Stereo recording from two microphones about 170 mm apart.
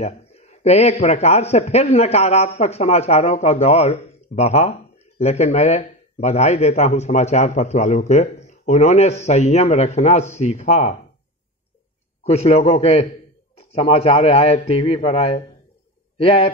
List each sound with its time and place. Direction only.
0.0 s a sound: 40° left (ahead or behind)
1.0 s speech: 40° left (ahead or behind)
12.2 s speech: 40° left (ahead or behind)